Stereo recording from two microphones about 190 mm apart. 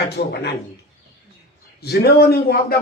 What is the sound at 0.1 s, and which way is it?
Speech, 60° left (ahead or behind).